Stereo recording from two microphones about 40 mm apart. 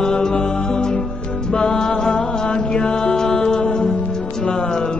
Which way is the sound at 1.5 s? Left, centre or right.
Centre.